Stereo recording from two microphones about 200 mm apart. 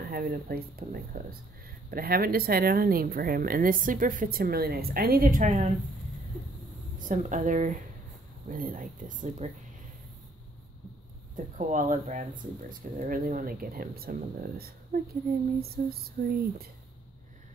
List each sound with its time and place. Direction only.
0.1 s speech: 45° right (ahead or behind)
7.0 s speech: 40° right (ahead or behind)
11.3 s speech: 40° right (ahead or behind)